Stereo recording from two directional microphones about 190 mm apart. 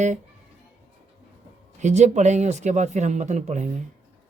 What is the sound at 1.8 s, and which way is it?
Speech, 35° right (ahead or behind).